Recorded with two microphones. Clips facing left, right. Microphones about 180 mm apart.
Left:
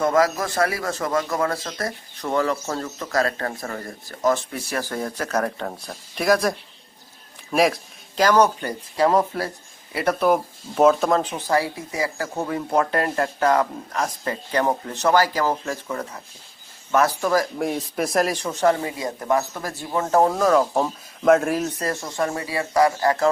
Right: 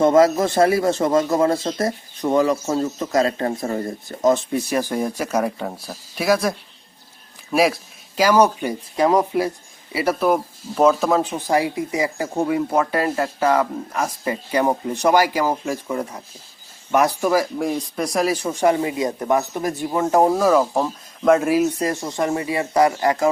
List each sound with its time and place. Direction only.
0.0 s a man's voice: 25° right (ahead or behind)
17.6 s speech: centre (ahead or behind)
18.6 s speech: 15° right (ahead or behind)
20.3 s speech: 5° right (ahead or behind)